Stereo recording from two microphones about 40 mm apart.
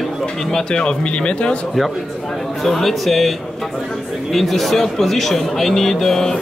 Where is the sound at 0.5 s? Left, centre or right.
Centre.